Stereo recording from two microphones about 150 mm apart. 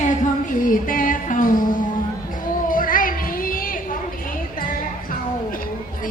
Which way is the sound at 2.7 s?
65° left (ahead or behind).